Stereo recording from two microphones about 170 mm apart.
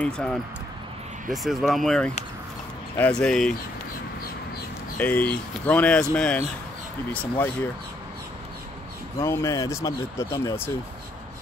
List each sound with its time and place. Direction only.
0.0 s speech: 5° left (ahead or behind)
4.9 s speech: 10° left (ahead or behind)
9.2 s speech: 15° left (ahead or behind)